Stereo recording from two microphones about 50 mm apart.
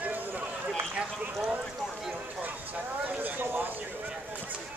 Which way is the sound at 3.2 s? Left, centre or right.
Right.